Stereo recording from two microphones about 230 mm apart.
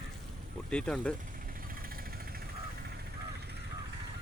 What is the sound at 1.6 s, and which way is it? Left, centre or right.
Vehicle, right.